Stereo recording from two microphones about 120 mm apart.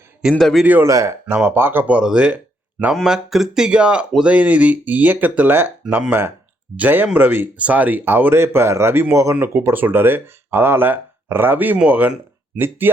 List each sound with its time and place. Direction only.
0.2 s a man's voice: centre (ahead or behind)
0.6 s speech: 15° right (ahead or behind)
0.9 s speech: 25° right (ahead or behind)